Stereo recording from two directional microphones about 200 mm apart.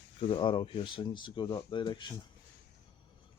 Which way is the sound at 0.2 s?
25° left (ahead or behind).